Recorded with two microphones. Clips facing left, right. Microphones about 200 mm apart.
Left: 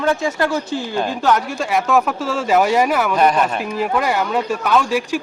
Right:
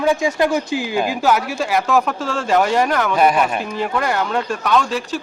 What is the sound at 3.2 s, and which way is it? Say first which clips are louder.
Speech: right 1 dB; 10° right (ahead or behind).